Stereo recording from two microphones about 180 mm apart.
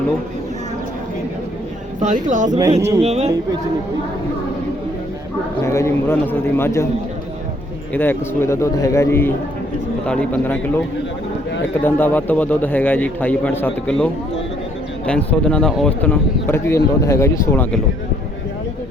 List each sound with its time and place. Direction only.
2.0 s speech: 45° right (ahead or behind)
2.6 s speech: 20° right (ahead or behind)
3.0 s speech: 35° right (ahead or behind)
5.6 s speech: 15° left (ahead or behind)
7.9 s speech: 10° left (ahead or behind)
11.8 s speech: 10° left (ahead or behind)